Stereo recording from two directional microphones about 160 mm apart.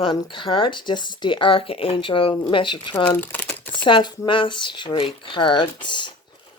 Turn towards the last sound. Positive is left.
turn(degrees=30)  # may be behind; listen again after turning